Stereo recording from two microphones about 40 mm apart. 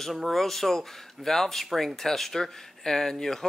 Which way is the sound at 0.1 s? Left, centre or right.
Centre.